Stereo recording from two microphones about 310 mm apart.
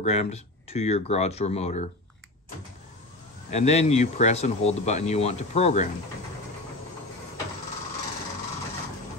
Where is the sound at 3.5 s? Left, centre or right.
Left.